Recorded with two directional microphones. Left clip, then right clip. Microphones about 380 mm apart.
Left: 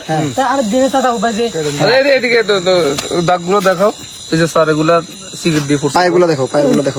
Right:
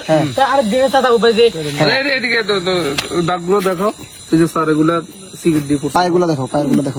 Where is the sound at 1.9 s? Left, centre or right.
Left.